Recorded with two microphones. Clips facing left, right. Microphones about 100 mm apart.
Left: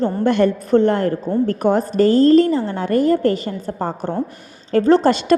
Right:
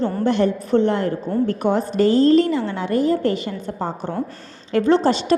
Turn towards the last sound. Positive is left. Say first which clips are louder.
# left 3 dB
turn(degrees=55)  # may be behind; listen again after turning